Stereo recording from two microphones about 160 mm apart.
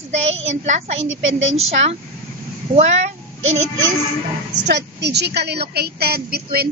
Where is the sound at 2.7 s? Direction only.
30° right (ahead or behind).